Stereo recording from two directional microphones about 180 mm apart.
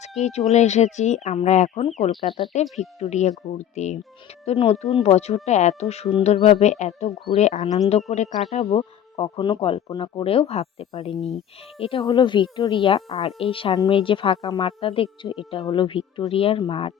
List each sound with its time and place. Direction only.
0.2 s speech: 40° left (ahead or behind)